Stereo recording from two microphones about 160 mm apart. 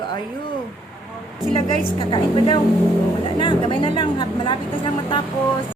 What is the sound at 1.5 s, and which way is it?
Speech, 35° left (ahead or behind).